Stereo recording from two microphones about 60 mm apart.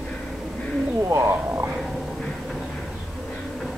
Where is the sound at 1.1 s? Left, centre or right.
Right.